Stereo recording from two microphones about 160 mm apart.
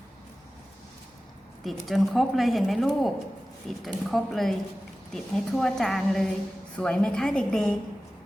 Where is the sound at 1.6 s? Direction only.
Centre (ahead or behind).